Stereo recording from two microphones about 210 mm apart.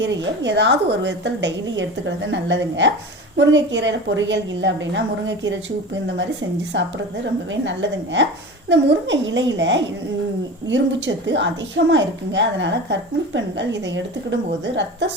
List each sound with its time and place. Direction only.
0.0 s a woman's voice: 55° right (ahead or behind)
6.7 s a woman's voice: 55° right (ahead or behind)